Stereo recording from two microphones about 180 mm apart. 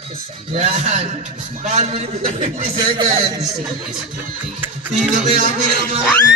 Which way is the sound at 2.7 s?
25° right (ahead or behind).